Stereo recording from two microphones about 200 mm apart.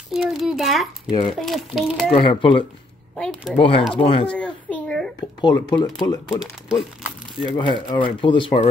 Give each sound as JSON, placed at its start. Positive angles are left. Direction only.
{"t": 0.1, "sound": "a child's voice", "side_deg": 0}
{"t": 2.1, "sound": "speech", "side_deg": 25}
{"t": 3.2, "sound": "speech", "side_deg": 5}
{"t": 3.5, "sound": "speech", "side_deg": 25}
{"t": 4.3, "sound": "a sound", "side_deg": 5}
{"t": 5.4, "sound": "speech", "side_deg": 20}
{"t": 7.4, "sound": "speech", "side_deg": 25}